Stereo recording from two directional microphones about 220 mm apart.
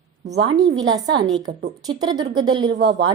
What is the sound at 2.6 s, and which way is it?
Speech, 50° right (ahead or behind).